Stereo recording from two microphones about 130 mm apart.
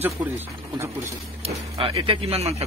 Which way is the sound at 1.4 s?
45° right (ahead or behind).